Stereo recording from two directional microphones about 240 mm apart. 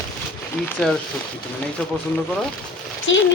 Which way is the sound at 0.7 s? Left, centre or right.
Centre.